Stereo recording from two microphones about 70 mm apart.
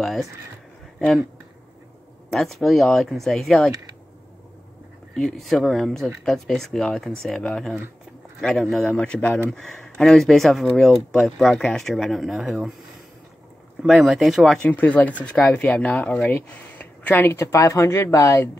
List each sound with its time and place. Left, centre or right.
0.0 s speech: centre
2.3 s speech: centre
5.2 s speech: centre
8.8 s speech: centre
13.8 s speech: centre
14.6 s speech: centre; by 18.2 s left